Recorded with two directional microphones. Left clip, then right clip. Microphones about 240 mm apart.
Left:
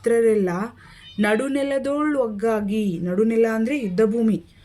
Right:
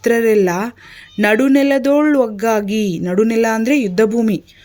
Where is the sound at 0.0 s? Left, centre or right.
Right.